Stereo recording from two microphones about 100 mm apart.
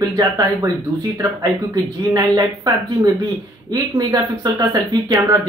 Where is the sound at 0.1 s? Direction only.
40° right (ahead or behind).